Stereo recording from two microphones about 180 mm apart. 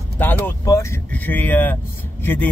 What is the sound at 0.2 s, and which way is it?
Speech, 10° left (ahead or behind).